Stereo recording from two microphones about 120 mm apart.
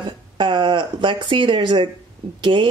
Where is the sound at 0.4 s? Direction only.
45° right (ahead or behind).